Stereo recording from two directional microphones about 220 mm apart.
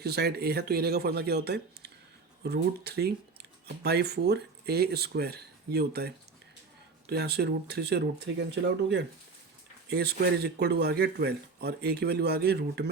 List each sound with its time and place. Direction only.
0.0 s speech: 45° right (ahead or behind)